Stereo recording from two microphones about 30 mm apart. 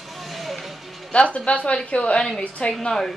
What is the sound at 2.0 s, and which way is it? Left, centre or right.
Speech, left.